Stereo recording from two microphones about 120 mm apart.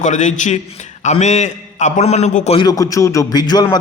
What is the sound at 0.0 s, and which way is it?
Speech, 90° left.